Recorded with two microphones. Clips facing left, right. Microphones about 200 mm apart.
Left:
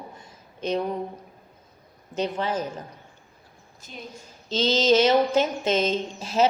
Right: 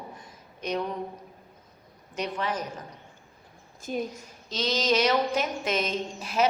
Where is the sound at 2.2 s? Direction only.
30° left (ahead or behind).